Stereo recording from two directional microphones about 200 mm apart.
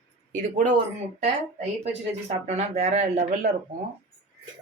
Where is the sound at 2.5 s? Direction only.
35° right (ahead or behind).